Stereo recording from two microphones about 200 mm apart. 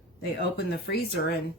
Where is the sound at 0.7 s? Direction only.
55° left (ahead or behind).